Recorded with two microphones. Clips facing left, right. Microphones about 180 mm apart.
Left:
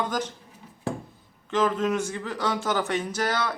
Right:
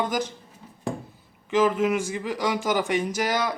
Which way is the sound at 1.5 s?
10° right (ahead or behind).